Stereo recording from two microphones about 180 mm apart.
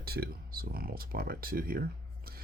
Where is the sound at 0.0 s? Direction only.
60° right (ahead or behind).